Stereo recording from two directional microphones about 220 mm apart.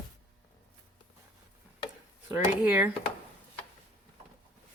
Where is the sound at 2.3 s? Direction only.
5° right (ahead or behind).